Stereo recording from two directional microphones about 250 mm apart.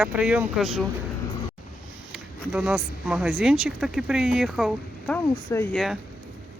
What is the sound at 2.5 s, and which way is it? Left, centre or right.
Speech, centre.